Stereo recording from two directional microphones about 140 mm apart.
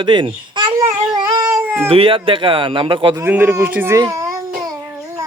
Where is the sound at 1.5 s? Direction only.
5° right (ahead or behind).